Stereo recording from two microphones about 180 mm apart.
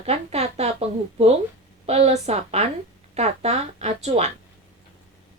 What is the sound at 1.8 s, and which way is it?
A woman's voice, 35° right (ahead or behind).